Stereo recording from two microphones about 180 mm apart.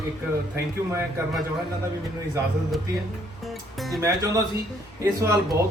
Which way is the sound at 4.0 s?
20° right (ahead or behind).